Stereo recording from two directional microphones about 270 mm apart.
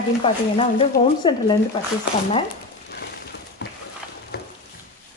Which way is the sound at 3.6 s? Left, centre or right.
Left.